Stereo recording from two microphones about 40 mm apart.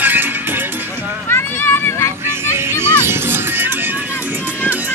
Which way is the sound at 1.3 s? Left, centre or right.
Left.